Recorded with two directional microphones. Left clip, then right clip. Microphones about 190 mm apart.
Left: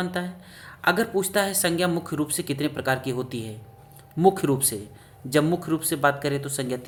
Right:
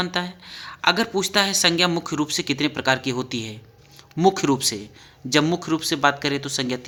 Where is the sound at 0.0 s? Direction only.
20° right (ahead or behind).